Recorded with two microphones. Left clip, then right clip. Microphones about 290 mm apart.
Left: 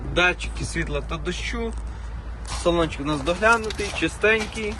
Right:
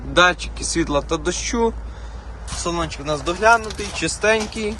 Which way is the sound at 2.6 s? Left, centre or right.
Centre.